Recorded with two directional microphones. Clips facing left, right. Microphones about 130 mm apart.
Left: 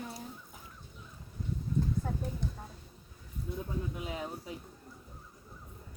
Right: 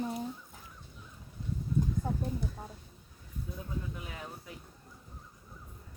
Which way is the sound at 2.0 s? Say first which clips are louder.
Right 2 dB; 15° right (ahead or behind).